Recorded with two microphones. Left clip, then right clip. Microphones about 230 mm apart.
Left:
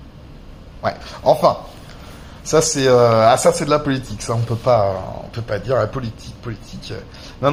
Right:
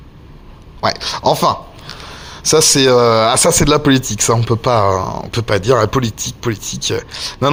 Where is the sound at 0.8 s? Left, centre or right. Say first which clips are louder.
Right 7 dB; right.